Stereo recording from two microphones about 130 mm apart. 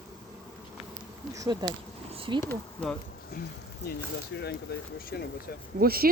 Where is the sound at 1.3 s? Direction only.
25° right (ahead or behind).